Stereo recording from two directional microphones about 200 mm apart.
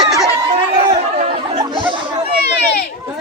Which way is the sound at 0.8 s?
25° right (ahead or behind).